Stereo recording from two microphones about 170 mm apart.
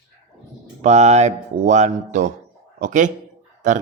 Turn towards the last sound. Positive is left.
turn(degrees=-45)  # may be behind; listen again after turning